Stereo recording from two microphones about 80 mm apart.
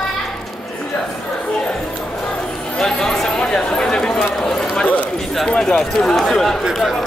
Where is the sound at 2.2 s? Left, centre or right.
Centre.